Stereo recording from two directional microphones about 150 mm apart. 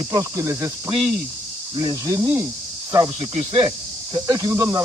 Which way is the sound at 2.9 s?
30° right (ahead or behind).